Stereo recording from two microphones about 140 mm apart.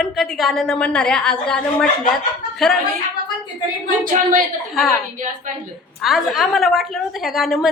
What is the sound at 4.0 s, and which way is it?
Speech, 70° right (ahead or behind).